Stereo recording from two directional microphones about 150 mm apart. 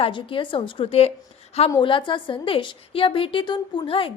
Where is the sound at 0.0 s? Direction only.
35° left (ahead or behind).